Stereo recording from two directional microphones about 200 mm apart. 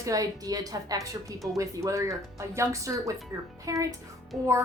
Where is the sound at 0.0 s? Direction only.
15° right (ahead or behind).